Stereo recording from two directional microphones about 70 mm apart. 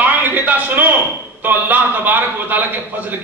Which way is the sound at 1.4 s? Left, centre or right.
Right.